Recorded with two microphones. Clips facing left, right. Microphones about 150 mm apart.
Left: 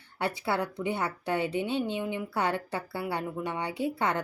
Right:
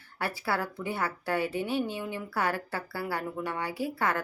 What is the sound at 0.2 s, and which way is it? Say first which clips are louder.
A woman's voice: left 2 dB; 20° left (ahead or behind).